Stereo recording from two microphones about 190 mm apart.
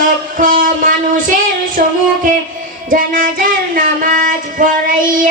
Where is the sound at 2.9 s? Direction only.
45° right (ahead or behind).